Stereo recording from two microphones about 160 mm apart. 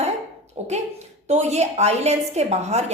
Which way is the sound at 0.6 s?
45° right (ahead or behind).